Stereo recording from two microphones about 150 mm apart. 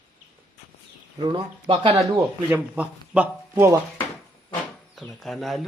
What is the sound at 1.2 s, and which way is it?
Speech, 30° right (ahead or behind).